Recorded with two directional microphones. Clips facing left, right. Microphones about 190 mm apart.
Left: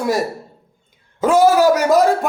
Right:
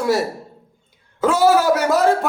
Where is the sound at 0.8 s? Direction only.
20° left (ahead or behind).